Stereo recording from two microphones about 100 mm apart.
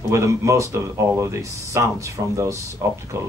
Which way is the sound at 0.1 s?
30° right (ahead or behind).